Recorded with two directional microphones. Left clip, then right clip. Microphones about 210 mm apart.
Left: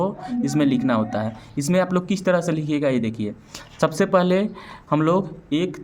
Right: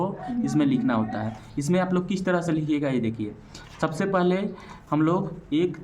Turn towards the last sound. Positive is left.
turn(degrees=45)  # may be behind; listen again after turning